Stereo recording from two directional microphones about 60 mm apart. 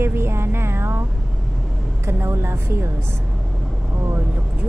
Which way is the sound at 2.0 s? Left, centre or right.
Right.